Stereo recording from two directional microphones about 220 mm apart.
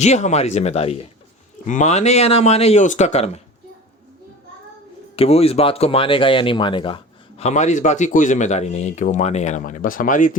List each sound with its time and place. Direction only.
0.0 s speech: 30° left (ahead or behind)
5.1 s speech: 25° left (ahead or behind)